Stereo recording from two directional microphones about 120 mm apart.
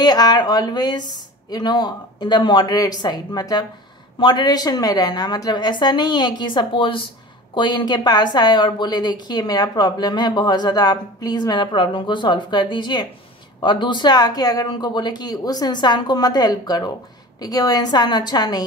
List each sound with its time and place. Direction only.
0.0 s a woman's voice: 35° left (ahead or behind)